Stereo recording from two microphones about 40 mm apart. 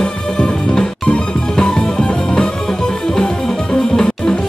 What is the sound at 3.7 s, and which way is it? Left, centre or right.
Music, centre.